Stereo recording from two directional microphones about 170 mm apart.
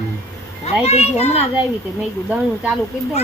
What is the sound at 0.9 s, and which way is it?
Speech, 40° left (ahead or behind).